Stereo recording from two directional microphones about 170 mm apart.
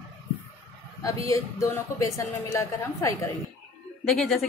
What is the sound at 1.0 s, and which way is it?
A woman's voice, 20° left (ahead or behind).